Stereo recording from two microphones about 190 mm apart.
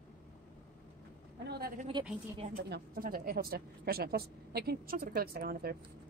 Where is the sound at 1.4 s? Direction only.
55° right (ahead or behind).